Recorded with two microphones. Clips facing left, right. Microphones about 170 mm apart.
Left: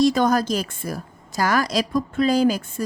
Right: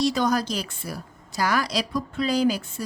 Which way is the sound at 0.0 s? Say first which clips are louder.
Left 5 dB; 50° left (ahead or behind).